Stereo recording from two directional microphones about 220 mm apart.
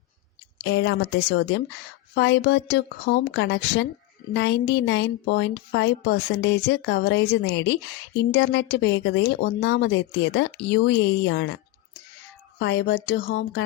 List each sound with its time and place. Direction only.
0.6 s a woman's voice: 50° left (ahead or behind)